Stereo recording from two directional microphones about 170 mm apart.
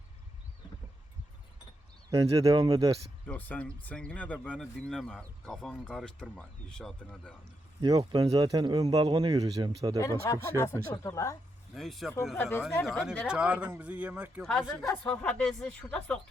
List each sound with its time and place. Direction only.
2.0 s speech: 20° right (ahead or behind)
3.2 s speech: 10° left (ahead or behind)
7.8 s speech: 20° right (ahead or behind)
10.0 s speech: 20° left (ahead or behind)
11.7 s speech: centre (ahead or behind)
12.4 s speech: 15° left (ahead or behind)
12.8 s speech: centre (ahead or behind)
14.4 s speech: centre (ahead or behind)